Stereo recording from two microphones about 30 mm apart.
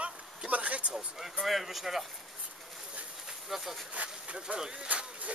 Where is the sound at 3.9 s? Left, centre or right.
Right.